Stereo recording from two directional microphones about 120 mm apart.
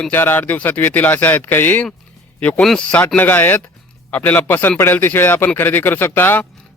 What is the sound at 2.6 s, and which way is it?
A man's voice, 5° left (ahead or behind).